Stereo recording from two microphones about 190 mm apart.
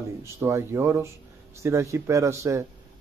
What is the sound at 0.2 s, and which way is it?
Speech, 15° right (ahead or behind).